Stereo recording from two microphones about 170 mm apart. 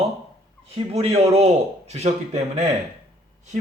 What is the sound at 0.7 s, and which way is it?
A man's voice, 35° right (ahead or behind).